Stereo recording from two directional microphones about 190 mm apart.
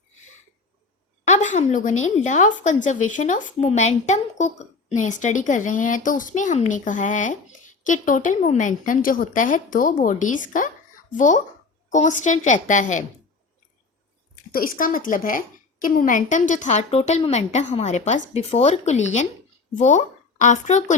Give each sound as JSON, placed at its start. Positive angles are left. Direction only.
{"t": 1.3, "sound": "a woman's voice", "side_deg": 40}
{"t": 11.9, "sound": "a woman's voice", "side_deg": 40}
{"t": 14.5, "sound": "a woman's voice", "side_deg": 50}